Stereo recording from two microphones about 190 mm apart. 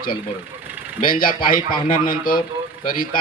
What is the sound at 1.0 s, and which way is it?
A man's voice, 50° left (ahead or behind).